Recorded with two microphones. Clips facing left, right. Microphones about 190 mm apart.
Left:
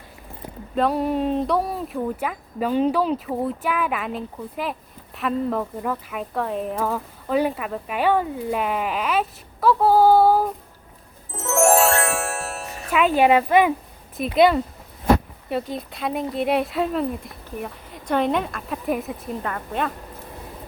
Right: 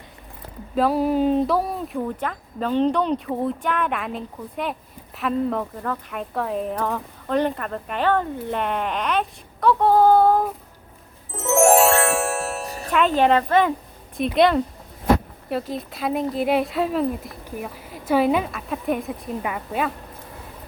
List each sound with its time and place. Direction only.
0.8 s speech: centre (ahead or behind)
11.3 s music: centre (ahead or behind)
12.6 s music: 35° right (ahead or behind)
12.9 s speech: 5° left (ahead or behind)
19.4 s speech: 10° right (ahead or behind)